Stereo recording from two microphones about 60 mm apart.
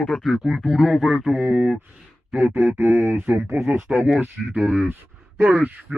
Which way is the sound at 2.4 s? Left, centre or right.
Right.